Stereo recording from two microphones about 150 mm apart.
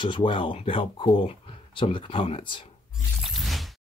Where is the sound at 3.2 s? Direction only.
Centre (ahead or behind).